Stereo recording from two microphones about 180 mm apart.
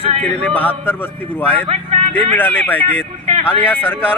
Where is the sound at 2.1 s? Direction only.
10° left (ahead or behind).